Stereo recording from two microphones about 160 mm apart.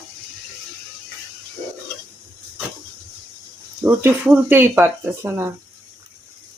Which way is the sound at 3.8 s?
15° right (ahead or behind).